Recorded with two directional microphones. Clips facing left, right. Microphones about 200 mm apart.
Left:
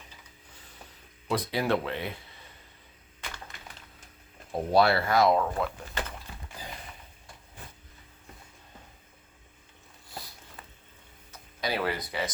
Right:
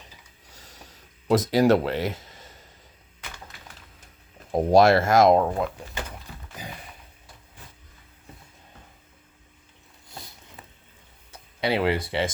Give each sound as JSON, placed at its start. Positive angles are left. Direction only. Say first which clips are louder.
{"t": 0.5, "sound": "a sound", "louder": "right 5 dB", "side_deg": -40}
{"t": 1.3, "sound": "speech", "louder": "right 9 dB", "side_deg": -40}
{"t": 2.1, "sound": "a sound", "louder": "right 4 dB", "side_deg": -40}
{"t": 4.8, "sound": "speech", "louder": "right 5 dB", "side_deg": -45}
{"t": 5.5, "sound": "speech", "louder": "right 3 dB", "side_deg": -10}
{"t": 11.7, "sound": "speech", "louder": "right 7 dB", "side_deg": -25}